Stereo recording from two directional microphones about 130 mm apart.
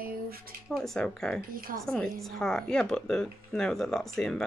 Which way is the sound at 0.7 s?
Centre (ahead or behind).